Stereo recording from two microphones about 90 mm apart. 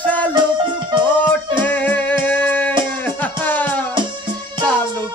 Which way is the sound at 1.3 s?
20° left (ahead or behind).